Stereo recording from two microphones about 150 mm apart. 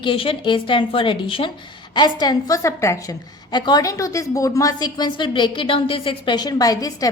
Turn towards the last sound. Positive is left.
turn(degrees=25)  # may be behind; listen again after turning